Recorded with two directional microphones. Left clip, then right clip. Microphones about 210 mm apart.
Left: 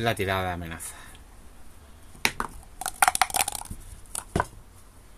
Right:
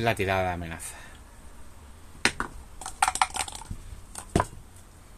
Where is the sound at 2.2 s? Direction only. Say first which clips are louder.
Even; 50° left (ahead or behind).